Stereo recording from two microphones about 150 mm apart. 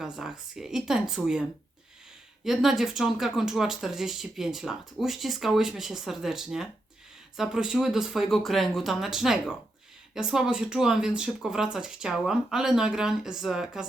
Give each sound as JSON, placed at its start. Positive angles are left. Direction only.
{"t": 0.0, "sound": "speech", "side_deg": -5}